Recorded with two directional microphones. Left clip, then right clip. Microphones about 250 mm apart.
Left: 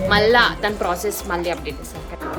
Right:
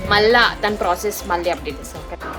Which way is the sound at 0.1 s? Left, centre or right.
Centre.